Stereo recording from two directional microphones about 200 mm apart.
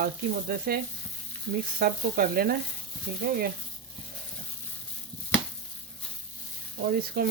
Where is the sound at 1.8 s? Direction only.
45° right (ahead or behind).